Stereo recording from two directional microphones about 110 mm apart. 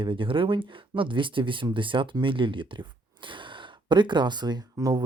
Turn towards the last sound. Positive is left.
turn(degrees=-35)  # may be behind; listen again after turning